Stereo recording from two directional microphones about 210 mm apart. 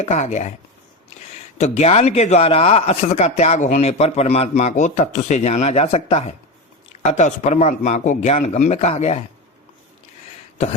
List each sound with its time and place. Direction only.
0.0 s a man's voice: 35° left (ahead or behind)
1.5 s a man's voice: 30° left (ahead or behind)